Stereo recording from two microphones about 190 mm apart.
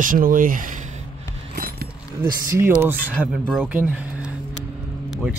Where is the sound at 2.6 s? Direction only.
10° right (ahead or behind).